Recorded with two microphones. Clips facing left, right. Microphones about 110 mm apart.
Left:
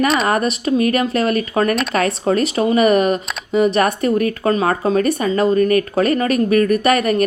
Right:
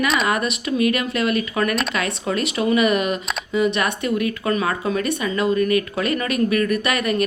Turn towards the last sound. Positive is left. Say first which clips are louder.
# left 6 dB
turn(degrees=40)  # may be behind; listen again after turning